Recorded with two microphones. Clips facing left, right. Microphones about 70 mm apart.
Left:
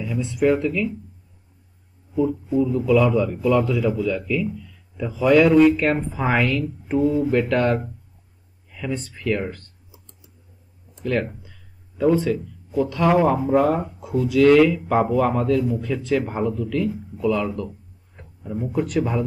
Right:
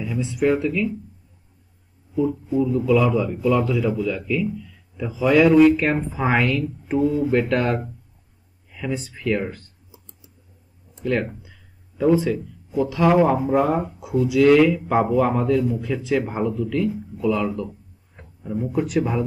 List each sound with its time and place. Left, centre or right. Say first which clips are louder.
0.0 s speech: left 1 dB; centre
2.5 s speech: even; centre
9.8 s whispering: right 1 dB; right
12.0 s speech: even; centre